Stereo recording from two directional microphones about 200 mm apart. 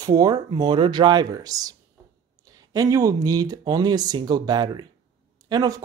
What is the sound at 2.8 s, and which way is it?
Speech, 15° right (ahead or behind).